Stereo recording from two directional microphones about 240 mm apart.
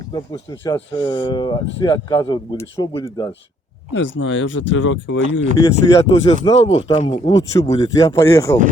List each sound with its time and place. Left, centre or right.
0.1 s speech: centre
3.9 s speech: left
5.5 s speech: centre